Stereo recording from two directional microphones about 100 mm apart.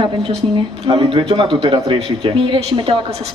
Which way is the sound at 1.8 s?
70° right (ahead or behind).